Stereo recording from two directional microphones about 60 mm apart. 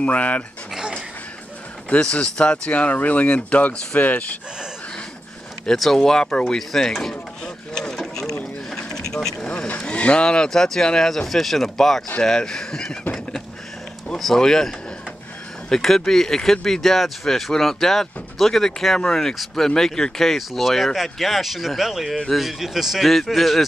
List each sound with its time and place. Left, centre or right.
0.0 s speech: left
1.9 s speech: centre
5.7 s speech: centre
6.9 s mechanisms: centre
8.6 s vehicle: centre
9.5 s speech: centre
14.1 s speech: centre
15.7 s speech: centre